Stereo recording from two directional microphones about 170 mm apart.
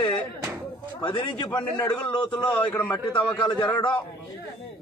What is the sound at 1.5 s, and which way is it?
A man's voice, 10° left (ahead or behind).